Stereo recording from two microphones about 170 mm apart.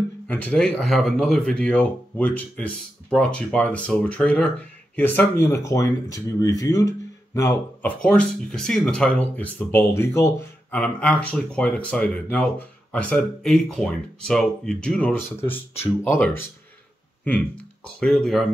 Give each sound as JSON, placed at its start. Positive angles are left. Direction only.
{"t": 0.3, "sound": "speech", "side_deg": 5}
{"t": 8.0, "sound": "speech", "side_deg": 5}
{"t": 17.8, "sound": "speech", "side_deg": 0}